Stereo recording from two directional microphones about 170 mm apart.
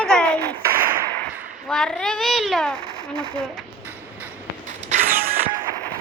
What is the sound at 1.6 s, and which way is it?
A child's voice, 5° left (ahead or behind).